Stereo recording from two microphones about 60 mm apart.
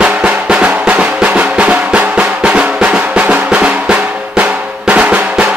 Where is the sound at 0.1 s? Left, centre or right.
Centre.